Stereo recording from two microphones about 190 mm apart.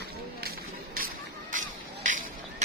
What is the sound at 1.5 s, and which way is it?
Music, 40° right (ahead or behind).